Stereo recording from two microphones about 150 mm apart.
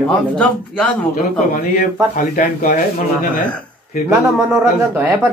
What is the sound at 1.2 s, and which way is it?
Speech, 85° left.